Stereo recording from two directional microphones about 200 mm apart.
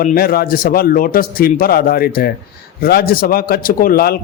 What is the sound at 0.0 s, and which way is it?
A man's voice, 45° left (ahead or behind).